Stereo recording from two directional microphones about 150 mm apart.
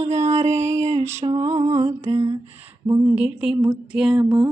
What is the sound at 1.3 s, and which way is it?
Music, 45° right (ahead or behind).